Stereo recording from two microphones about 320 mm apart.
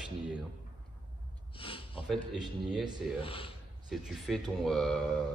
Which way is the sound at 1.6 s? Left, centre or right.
Centre.